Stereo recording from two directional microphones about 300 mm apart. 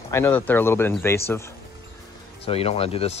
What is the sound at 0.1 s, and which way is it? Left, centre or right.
Speech, centre.